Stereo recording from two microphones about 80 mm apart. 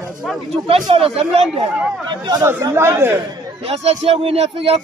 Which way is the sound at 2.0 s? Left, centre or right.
Right.